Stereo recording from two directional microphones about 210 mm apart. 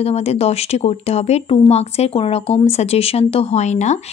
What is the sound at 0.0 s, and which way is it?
Speech, 30° left (ahead or behind).